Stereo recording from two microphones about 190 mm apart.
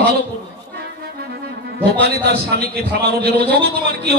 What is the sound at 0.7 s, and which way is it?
Accordion, 60° right (ahead or behind).